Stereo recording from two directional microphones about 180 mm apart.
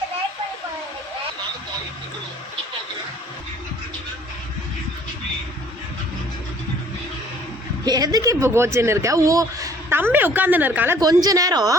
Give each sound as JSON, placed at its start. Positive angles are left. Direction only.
{"t": 7.9, "sound": "speech", "side_deg": -20}